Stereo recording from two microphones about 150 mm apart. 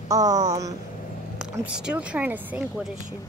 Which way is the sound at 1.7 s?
5° right (ahead or behind).